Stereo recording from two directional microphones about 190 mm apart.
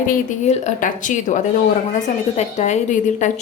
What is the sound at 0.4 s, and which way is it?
A woman's voice, 40° left (ahead or behind).